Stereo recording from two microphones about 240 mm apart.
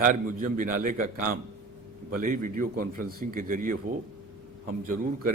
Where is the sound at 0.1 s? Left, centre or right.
Right.